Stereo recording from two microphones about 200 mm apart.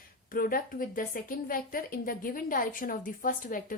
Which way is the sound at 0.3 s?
45° left (ahead or behind).